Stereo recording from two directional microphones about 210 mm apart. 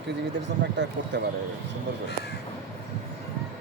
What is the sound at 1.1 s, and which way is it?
Speech, 55° right (ahead or behind).